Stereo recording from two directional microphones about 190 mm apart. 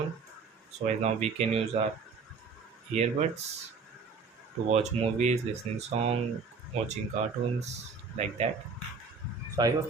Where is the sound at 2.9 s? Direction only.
35° right (ahead or behind).